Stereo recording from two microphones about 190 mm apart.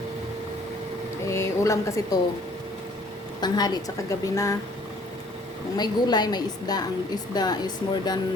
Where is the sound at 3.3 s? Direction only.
20° left (ahead or behind).